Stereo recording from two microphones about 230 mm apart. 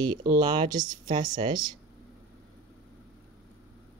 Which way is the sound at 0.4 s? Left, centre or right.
Centre.